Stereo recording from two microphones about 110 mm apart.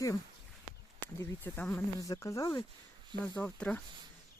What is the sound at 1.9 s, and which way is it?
Speech, 30° left (ahead or behind).